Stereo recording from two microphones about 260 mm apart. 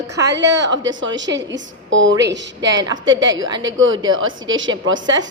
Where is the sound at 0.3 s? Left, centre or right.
Right.